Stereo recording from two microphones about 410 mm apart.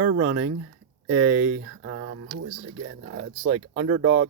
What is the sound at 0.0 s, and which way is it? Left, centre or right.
Speech, right.